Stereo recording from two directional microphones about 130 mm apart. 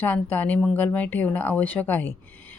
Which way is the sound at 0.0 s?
15° left (ahead or behind).